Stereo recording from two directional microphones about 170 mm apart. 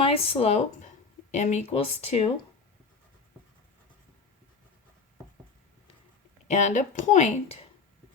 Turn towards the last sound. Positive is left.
turn(degrees=45)  # may be behind; listen again after turning